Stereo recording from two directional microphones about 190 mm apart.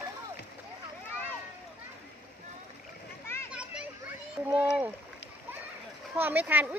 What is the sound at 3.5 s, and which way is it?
Children playing, 5° right (ahead or behind).